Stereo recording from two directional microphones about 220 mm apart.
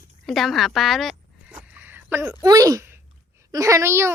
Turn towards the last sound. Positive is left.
turn(degrees=-10)  # may be behind; listen again after turning